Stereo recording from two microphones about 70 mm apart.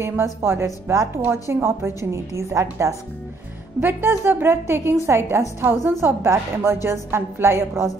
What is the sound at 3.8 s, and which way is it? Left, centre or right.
A woman's voice, right.